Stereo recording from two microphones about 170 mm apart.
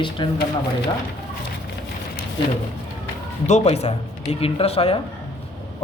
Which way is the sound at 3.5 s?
40° left (ahead or behind).